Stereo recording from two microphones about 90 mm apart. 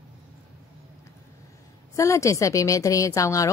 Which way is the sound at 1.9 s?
35° left (ahead or behind).